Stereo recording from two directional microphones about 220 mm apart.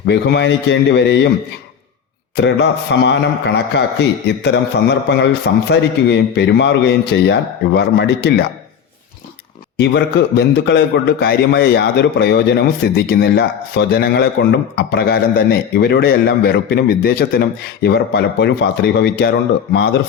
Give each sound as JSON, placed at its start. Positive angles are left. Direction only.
{"t": 0.1, "sound": "a man's voice", "side_deg": 50}
{"t": 2.3, "sound": "a man's voice", "side_deg": 50}
{"t": 9.7, "sound": "a man's voice", "side_deg": 50}